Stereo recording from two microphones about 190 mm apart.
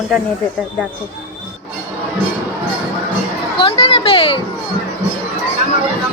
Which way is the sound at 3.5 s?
30° left (ahead or behind).